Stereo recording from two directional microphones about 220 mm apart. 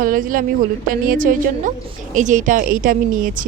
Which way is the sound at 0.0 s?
40° right (ahead or behind).